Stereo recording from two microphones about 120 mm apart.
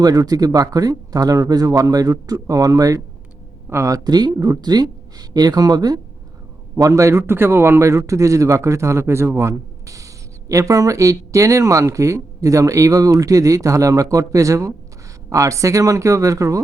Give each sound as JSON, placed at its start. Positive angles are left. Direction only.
{"t": 0.0, "sound": "speech", "side_deg": -30}